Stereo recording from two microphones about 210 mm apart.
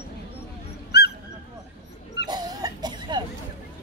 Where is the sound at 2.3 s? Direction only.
20° right (ahead or behind).